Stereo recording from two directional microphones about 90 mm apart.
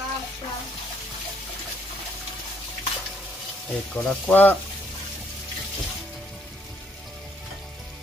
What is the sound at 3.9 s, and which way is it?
Speech, 10° left (ahead or behind).